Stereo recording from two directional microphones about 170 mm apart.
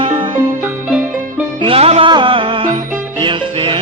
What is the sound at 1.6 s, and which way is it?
Music, 35° right (ahead or behind).